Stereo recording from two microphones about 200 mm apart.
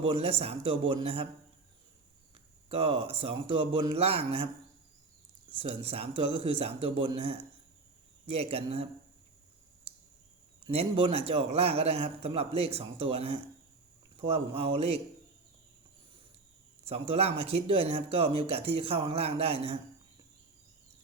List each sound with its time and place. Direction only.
0.0 s speech: 30° right (ahead or behind)
2.6 s speech: 30° right (ahead or behind)
5.5 s a man's voice: 30° right (ahead or behind)
10.7 s a man's voice: 30° right (ahead or behind)
16.8 s speech: 30° right (ahead or behind)